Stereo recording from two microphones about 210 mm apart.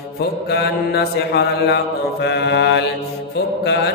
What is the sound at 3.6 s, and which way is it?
Speech, 55° left (ahead or behind).